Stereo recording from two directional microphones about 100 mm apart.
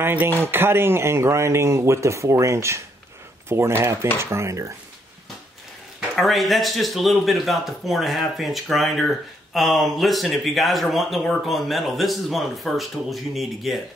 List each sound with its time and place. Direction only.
0.0 s speech: 20° right (ahead or behind)
5.9 s speech: centre (ahead or behind)